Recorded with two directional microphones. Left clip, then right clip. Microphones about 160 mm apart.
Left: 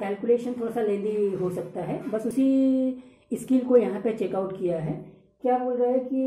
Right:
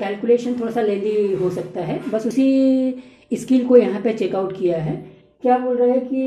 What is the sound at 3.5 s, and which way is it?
Speech, 5° right (ahead or behind).